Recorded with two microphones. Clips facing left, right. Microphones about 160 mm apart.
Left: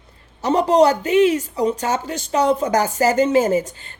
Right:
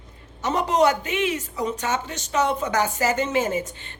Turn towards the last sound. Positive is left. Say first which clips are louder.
# left 7 dB
turn(degrees=35)  # may be behind; listen again after turning